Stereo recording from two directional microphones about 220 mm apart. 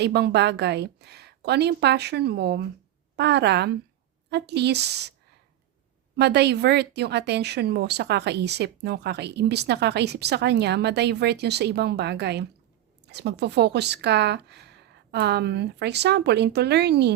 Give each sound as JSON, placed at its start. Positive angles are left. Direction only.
{"t": 0.0, "sound": "speech", "side_deg": -50}
{"t": 6.1, "sound": "speech", "side_deg": -50}